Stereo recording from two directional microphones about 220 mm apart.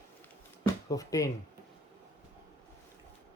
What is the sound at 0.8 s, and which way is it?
Speech, 15° left (ahead or behind).